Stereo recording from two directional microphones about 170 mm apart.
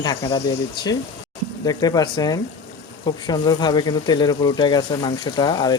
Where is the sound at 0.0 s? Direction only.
25° left (ahead or behind).